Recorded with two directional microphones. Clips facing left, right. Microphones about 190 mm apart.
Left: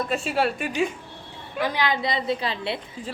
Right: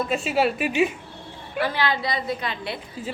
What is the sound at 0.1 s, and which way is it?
Speech, centre (ahead or behind).